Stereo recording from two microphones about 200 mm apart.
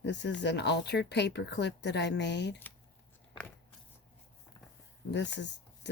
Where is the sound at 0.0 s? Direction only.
60° left (ahead or behind).